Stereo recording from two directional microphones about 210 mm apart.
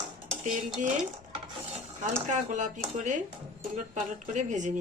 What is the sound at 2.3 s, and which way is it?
Speech, 35° right (ahead or behind).